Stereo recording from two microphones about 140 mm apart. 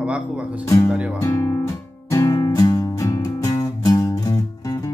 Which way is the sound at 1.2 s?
25° left (ahead or behind).